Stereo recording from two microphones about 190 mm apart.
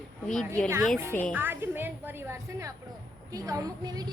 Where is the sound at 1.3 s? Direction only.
10° right (ahead or behind).